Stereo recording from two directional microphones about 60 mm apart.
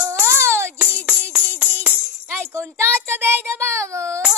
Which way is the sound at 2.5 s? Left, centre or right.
Right.